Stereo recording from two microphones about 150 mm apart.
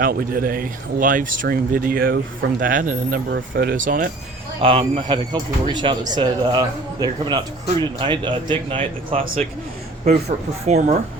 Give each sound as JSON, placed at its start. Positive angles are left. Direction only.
{"t": 0.0, "sound": "speech", "side_deg": -75}
{"t": 2.6, "sound": "speech", "side_deg": -65}
{"t": 4.6, "sound": "speech", "side_deg": -35}
{"t": 10.2, "sound": "speech", "side_deg": -50}